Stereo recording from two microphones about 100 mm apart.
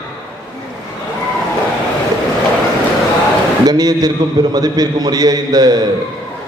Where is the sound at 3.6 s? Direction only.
40° right (ahead or behind).